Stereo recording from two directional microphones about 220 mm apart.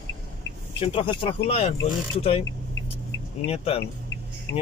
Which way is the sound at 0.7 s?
25° left (ahead or behind).